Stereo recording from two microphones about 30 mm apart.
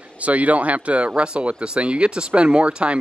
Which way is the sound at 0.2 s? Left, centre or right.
Right.